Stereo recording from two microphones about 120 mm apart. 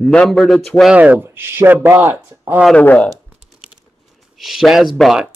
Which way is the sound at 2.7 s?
10° left (ahead or behind).